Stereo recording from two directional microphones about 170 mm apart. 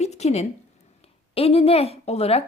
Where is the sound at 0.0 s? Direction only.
40° left (ahead or behind).